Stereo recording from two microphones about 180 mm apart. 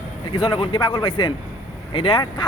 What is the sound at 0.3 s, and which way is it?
A man's voice, 30° left (ahead or behind).